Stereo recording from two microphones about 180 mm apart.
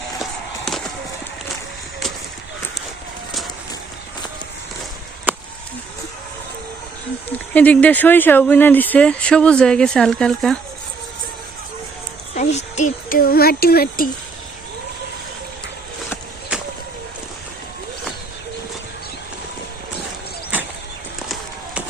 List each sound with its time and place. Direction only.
0.2 s a sound: centre (ahead or behind)
7.5 s speech: 10° left (ahead or behind)
12.4 s speech: 40° left (ahead or behind); by 14.1 s 55° left (ahead or behind)